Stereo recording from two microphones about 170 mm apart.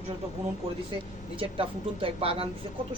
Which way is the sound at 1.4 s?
30° right (ahead or behind).